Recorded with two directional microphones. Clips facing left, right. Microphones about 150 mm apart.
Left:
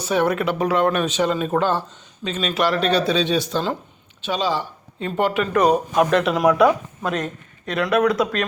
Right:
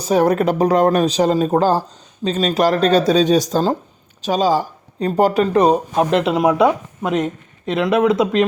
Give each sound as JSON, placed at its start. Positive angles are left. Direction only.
{"t": 0.0, "sound": "speech", "side_deg": -40}